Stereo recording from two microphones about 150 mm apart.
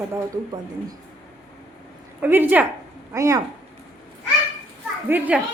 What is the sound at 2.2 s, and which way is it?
A woman's voice, 10° right (ahead or behind).